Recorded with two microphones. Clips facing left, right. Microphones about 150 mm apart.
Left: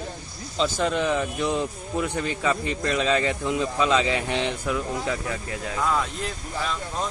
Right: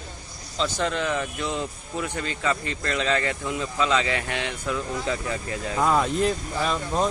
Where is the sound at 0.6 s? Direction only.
10° left (ahead or behind).